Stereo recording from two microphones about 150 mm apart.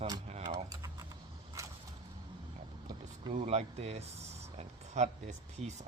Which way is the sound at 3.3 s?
40° right (ahead or behind).